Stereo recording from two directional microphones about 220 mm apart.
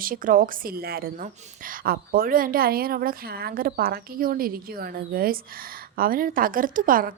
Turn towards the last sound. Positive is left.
turn(degrees=-40)  # may be behind; listen again after turning